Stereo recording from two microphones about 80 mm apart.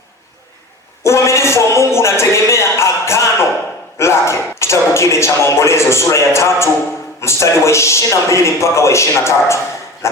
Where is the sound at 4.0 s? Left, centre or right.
Left.